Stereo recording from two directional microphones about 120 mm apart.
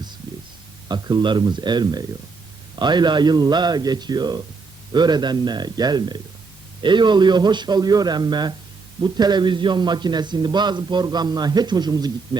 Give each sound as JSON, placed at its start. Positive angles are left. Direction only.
{"t": 0.9, "sound": "a man's voice", "side_deg": -35}